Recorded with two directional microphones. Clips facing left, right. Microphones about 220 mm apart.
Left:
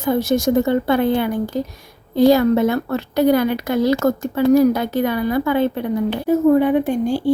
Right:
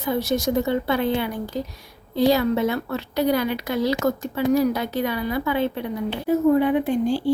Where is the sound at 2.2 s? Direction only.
50° left (ahead or behind).